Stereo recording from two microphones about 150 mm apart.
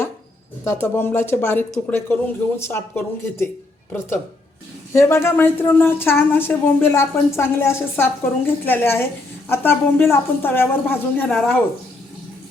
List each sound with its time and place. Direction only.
0.6 s a woman's voice: 15° left (ahead or behind)
4.9 s a woman's voice: 20° left (ahead or behind)
11.3 s speech: centre (ahead or behind)